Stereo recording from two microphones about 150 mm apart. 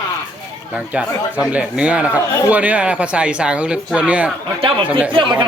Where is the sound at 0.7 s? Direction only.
5° right (ahead or behind).